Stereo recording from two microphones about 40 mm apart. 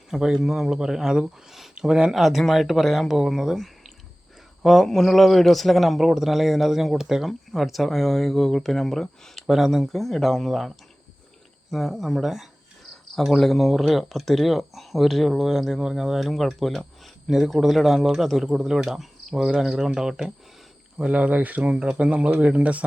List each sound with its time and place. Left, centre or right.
0.1 s a man's voice: centre
1.5 s a sound: centre
1.7 s speech: centre
2.1 s speech: centre
4.6 s speech: centre
9.5 s speech: centre
17.2 s speech: centre
21.0 s speech: right
21.6 s speech: right